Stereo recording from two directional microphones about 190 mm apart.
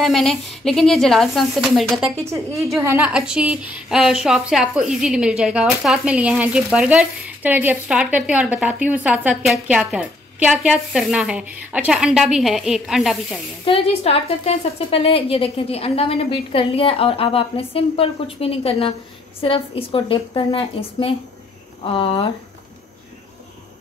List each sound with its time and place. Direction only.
0.0 s a woman's voice: centre (ahead or behind)
13.7 s a woman's voice: 30° left (ahead or behind)